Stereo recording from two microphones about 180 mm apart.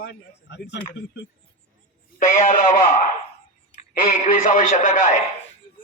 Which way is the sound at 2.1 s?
45° left (ahead or behind).